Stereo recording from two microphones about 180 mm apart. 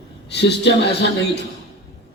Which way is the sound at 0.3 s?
70° left (ahead or behind).